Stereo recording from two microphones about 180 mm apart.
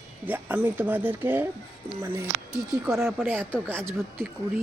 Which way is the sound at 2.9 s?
10° right (ahead or behind).